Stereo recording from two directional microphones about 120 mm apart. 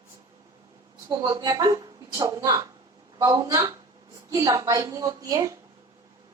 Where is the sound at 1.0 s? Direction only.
35° right (ahead or behind).